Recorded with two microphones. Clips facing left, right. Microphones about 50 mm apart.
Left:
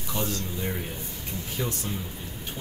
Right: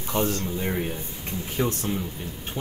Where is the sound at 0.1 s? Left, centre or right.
Right.